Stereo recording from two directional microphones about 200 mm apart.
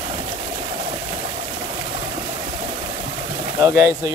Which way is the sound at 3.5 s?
10° right (ahead or behind).